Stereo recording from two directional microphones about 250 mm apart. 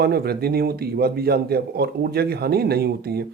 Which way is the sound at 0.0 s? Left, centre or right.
Right.